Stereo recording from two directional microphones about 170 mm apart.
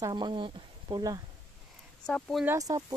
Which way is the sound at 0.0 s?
25° right (ahead or behind).